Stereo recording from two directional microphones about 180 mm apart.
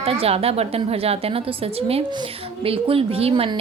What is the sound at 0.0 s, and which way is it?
A woman's voice, 30° right (ahead or behind).